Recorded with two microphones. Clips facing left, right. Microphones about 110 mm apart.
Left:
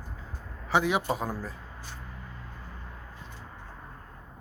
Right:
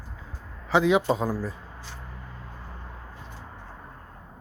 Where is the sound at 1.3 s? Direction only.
10° right (ahead or behind).